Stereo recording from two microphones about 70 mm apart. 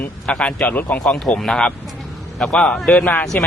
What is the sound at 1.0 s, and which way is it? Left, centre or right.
A man's voice, centre.